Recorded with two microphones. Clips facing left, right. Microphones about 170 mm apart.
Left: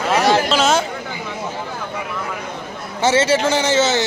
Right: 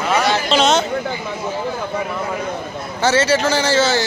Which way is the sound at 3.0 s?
25° left (ahead or behind).